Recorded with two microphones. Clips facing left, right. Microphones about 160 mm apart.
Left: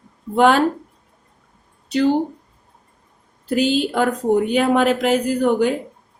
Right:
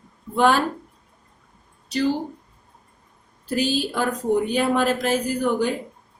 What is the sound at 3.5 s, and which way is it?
A woman's voice, 65° left (ahead or behind).